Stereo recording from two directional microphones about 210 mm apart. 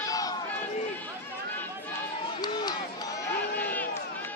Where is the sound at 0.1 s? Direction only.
15° left (ahead or behind).